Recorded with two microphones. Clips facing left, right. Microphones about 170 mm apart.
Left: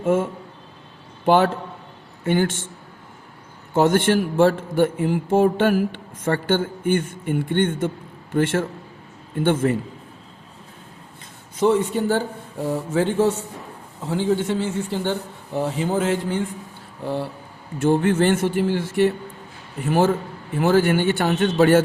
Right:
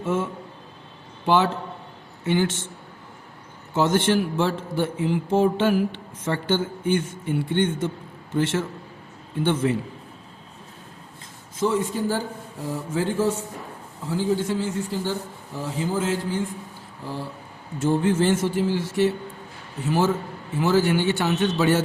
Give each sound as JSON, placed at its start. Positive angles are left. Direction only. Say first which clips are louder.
{"t": 0.0, "sound": "a man's voice", "louder": "left 5 dB", "side_deg": 55}
{"t": 3.8, "sound": "a man's voice", "louder": "left 3 dB", "side_deg": 50}
{"t": 11.5, "sound": "a man's voice", "louder": "left 5 dB", "side_deg": 65}
{"t": 17.0, "sound": "a sound", "louder": "left 7 dB", "side_deg": 65}
{"t": 17.7, "sound": "a man's voice", "louder": "left 3 dB", "side_deg": 65}